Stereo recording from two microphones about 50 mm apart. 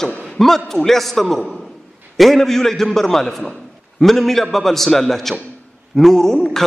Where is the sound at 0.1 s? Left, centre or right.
Left.